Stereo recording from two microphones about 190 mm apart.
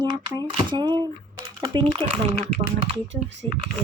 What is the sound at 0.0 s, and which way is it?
Speech, 25° right (ahead or behind).